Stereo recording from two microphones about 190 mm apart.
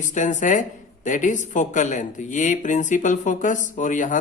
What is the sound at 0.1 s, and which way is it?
Speech, 40° left (ahead or behind).